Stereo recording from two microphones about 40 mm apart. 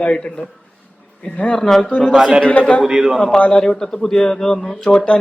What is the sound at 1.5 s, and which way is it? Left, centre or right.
Speech, centre.